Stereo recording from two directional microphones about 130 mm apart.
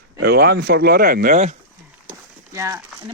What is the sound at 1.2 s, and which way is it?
Speech, 75° right (ahead or behind).